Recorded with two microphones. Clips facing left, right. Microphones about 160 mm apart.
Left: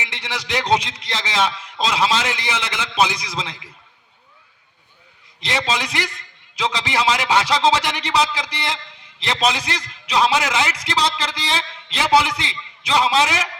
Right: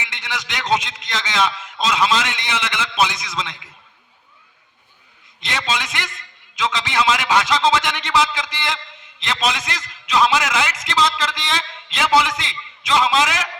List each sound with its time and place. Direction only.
0.0 s a man's voice: 30° left (ahead or behind)
5.5 s a man's voice: 30° left (ahead or behind)